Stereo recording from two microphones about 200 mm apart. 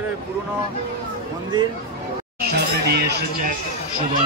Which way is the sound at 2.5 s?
55° right (ahead or behind).